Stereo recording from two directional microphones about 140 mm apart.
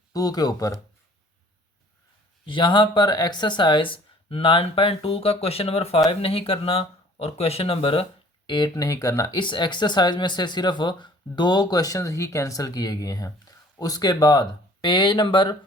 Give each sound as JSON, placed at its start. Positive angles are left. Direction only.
{"t": 0.1, "sound": "speech", "side_deg": 25}
{"t": 2.5, "sound": "speech", "side_deg": 35}
{"t": 8.4, "sound": "speech", "side_deg": 30}